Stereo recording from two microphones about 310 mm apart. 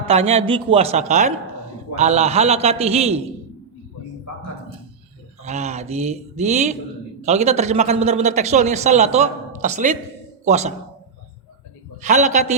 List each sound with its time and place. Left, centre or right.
0.0 s a man's voice: centre
5.4 s a man's voice: right
11.9 s a man's voice: right